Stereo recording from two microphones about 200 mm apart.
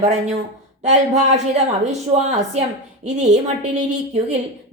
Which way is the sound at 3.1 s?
35° right (ahead or behind).